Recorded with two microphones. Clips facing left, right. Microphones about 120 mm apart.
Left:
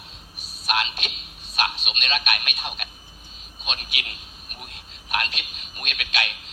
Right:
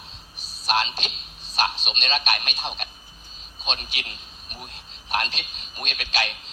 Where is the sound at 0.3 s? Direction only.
30° right (ahead or behind).